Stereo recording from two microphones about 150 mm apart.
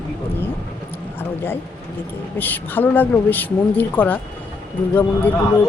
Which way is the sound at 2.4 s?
10° left (ahead or behind).